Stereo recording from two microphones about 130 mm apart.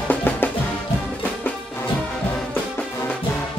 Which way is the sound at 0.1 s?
15° left (ahead or behind).